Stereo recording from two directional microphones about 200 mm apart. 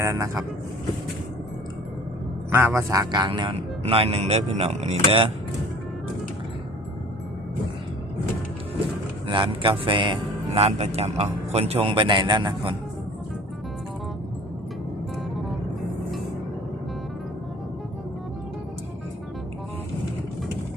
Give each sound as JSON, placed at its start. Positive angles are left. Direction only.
{"t": 0.0, "sound": "speech", "side_deg": -15}
{"t": 2.5, "sound": "a man's voice", "side_deg": -10}
{"t": 9.2, "sound": "a man's voice", "side_deg": -25}
{"t": 15.4, "sound": "music", "side_deg": 0}